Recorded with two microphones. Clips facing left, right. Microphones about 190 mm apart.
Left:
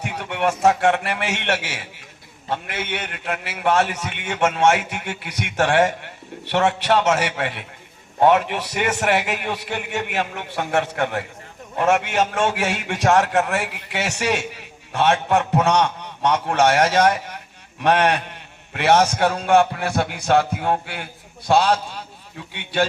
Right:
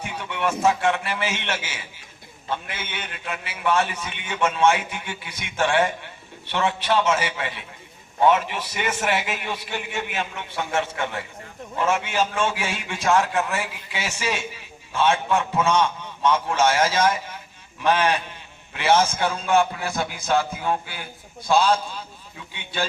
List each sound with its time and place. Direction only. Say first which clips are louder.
0.0 s a man's voice: left 4 dB; 65° left (ahead or behind)